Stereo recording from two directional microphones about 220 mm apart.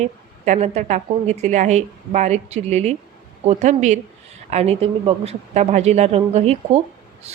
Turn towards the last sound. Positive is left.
turn(degrees=-30)  # may be behind; listen again after turning